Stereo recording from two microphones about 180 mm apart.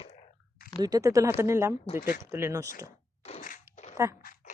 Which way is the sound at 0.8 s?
20° right (ahead or behind).